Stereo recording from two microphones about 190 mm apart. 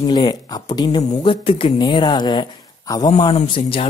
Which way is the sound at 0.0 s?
25° left (ahead or behind).